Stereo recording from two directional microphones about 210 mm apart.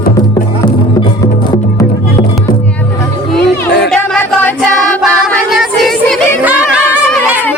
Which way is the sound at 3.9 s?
5° left (ahead or behind).